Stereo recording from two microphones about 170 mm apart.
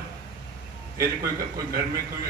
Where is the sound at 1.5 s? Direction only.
20° right (ahead or behind).